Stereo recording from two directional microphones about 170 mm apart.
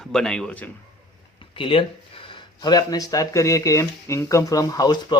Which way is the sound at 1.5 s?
30° left (ahead or behind).